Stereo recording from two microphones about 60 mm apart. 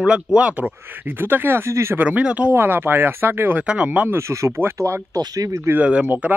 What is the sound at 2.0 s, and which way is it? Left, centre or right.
Speech, right.